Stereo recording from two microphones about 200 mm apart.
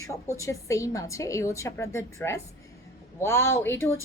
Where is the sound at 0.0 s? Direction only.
15° left (ahead or behind).